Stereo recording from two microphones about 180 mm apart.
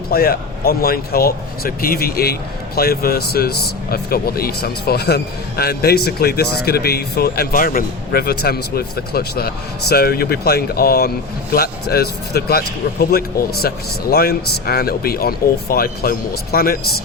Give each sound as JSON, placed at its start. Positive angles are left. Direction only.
{"t": 0.1, "sound": "speech", "side_deg": 55}